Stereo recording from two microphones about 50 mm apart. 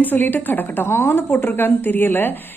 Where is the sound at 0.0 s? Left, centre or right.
Left.